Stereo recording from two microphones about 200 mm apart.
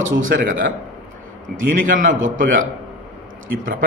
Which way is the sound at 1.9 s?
40° right (ahead or behind).